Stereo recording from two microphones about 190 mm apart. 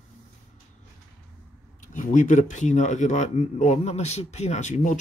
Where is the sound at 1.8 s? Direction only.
40° left (ahead or behind).